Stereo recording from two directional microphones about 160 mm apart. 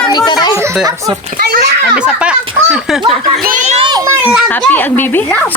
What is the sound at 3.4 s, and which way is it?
Speech, 55° right (ahead or behind).